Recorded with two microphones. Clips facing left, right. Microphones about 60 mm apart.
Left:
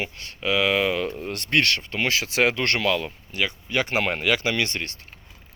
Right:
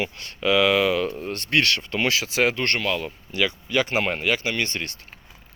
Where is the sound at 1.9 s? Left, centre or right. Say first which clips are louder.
Right 1 dB; left.